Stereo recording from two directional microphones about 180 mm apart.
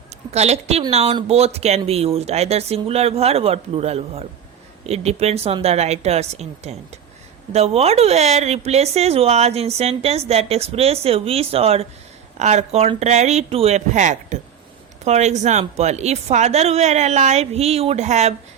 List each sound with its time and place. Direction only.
0.3 s speech: 35° right (ahead or behind)